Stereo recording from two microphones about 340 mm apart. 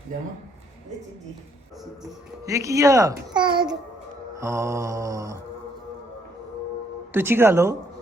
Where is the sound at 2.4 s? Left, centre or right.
Centre.